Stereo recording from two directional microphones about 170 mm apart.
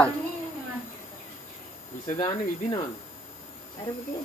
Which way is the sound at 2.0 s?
30° left (ahead or behind).